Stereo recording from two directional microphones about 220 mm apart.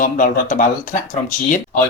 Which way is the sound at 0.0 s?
35° left (ahead or behind).